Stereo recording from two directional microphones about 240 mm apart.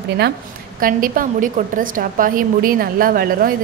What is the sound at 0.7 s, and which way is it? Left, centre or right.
A woman's voice, right.